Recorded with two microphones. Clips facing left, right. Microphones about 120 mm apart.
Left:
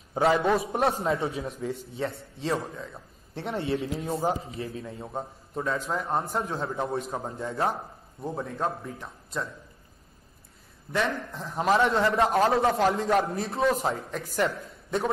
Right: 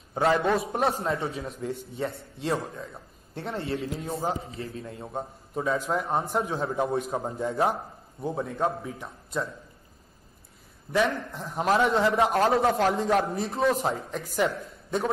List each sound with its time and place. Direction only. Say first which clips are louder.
0.1 s a man's voice: left 1 dB; centre (ahead or behind)
3.5 s speech: left 3 dB; 20° left (ahead or behind)
4.3 s a man's voice: left 2 dB; centre (ahead or behind)
10.9 s a man's voice: right 3 dB; centre (ahead or behind)